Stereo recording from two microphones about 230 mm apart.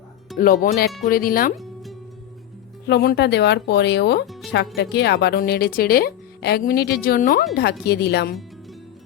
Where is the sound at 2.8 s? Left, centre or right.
Left.